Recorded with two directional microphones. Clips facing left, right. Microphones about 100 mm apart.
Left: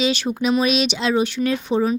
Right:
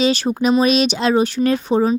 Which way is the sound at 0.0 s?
35° right (ahead or behind).